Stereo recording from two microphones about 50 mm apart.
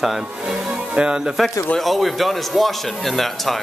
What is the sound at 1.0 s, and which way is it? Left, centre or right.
Speech, centre.